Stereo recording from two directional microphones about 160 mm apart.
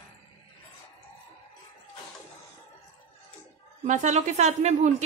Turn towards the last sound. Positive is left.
turn(degrees=-45)  # may be behind; listen again after turning